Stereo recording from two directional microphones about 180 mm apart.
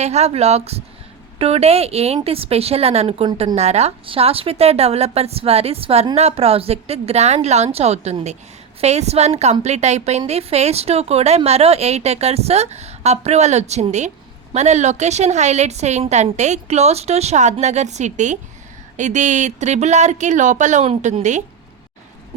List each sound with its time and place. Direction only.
0.0 s speech: 35° right (ahead or behind)